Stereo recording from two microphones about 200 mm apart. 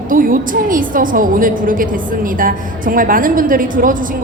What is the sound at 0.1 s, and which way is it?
A woman's voice, 45° right (ahead or behind).